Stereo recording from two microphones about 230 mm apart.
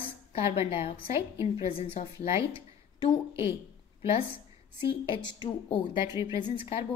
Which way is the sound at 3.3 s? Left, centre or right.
Centre.